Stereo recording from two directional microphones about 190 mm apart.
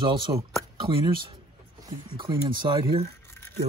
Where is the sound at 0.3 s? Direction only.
20° right (ahead or behind).